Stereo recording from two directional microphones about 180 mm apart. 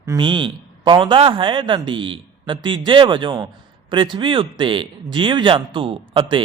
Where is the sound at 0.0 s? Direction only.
20° right (ahead or behind).